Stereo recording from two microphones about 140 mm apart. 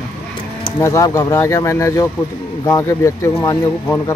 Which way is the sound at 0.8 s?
20° left (ahead or behind).